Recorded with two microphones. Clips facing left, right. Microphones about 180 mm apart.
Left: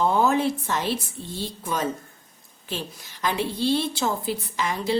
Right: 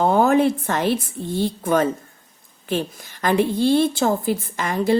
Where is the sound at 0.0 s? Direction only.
55° right (ahead or behind).